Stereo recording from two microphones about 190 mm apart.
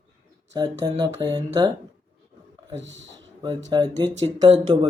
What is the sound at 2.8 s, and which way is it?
Speech, 70° right (ahead or behind).